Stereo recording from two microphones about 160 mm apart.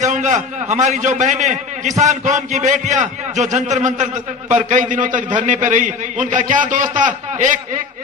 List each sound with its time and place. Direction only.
0.0 s a man's voice: 50° right (ahead or behind)